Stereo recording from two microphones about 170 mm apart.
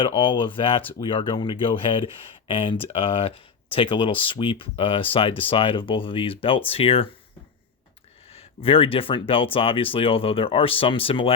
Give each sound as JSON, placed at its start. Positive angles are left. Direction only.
{"t": 0.0, "sound": "speech", "side_deg": 30}
{"t": 8.3, "sound": "speech", "side_deg": 35}